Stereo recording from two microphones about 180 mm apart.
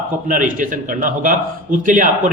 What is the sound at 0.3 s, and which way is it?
A man's voice, 50° right (ahead or behind).